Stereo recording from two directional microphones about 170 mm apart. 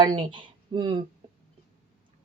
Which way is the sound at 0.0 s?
30° right (ahead or behind).